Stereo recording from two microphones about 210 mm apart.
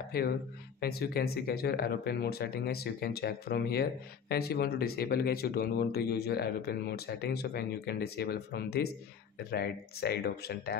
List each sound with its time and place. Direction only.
0.1 s speech: 45° left (ahead or behind)